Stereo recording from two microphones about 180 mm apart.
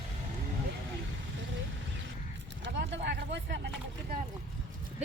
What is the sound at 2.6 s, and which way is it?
Speech, 80° right.